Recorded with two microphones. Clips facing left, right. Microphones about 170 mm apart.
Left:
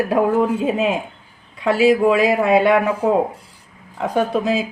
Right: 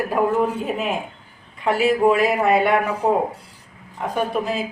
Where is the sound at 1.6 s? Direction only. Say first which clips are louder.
Left 3 dB; 90° left.